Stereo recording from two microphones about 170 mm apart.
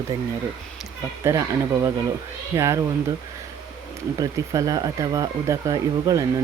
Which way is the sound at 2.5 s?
15° right (ahead or behind).